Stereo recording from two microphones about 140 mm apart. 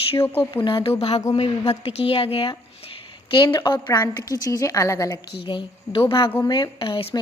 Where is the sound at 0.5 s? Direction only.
35° left (ahead or behind).